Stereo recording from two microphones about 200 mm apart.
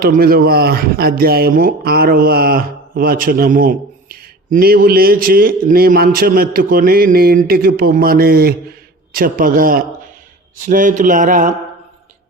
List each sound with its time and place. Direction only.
0.0 s a man's voice: 45° right (ahead or behind)